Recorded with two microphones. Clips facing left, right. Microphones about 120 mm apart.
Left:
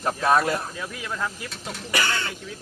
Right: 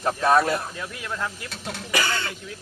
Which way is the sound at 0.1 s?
10° left (ahead or behind).